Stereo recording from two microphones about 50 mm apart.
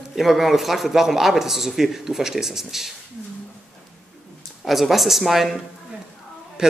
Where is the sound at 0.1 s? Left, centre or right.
Centre.